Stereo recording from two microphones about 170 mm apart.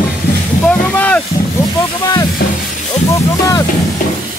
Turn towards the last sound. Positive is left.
turn(degrees=20)  # may be behind; listen again after turning